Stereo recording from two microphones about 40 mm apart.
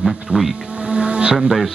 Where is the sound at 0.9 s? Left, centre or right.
Right.